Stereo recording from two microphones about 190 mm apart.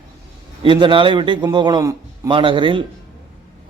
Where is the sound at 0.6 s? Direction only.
25° right (ahead or behind).